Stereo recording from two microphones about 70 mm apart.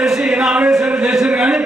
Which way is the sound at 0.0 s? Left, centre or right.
Centre.